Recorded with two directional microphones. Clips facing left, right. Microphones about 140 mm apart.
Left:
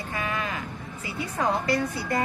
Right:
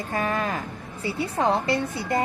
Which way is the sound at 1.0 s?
30° right (ahead or behind).